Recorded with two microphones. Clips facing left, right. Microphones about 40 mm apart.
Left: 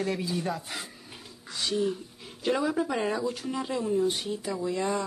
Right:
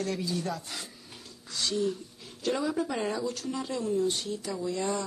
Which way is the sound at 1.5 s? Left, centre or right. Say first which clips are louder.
Left 1 dB; centre.